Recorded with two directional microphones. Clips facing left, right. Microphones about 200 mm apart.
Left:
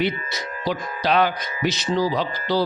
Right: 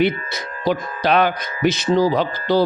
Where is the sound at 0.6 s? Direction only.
55° right (ahead or behind).